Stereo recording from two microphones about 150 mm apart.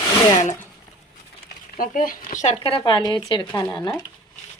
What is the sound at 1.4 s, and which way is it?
Speech, 70° left (ahead or behind).